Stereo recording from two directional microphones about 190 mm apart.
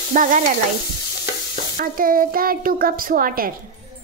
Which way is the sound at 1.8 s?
50° right (ahead or behind).